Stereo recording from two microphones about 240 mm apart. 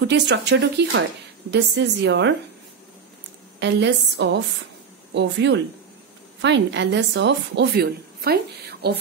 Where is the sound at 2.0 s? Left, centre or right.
Right.